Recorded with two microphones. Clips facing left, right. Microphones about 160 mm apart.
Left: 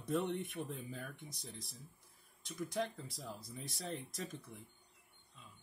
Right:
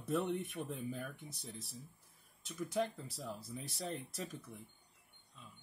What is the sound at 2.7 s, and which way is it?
Speech, 5° right (ahead or behind).